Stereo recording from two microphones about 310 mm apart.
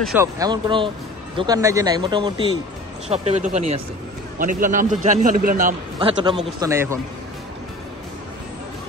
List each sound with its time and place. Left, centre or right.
0.0 s a man's voice: centre